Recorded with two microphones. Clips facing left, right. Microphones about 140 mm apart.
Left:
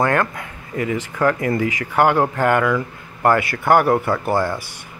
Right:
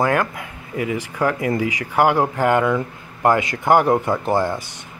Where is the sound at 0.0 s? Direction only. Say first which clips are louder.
Left 1 dB; 10° right (ahead or behind).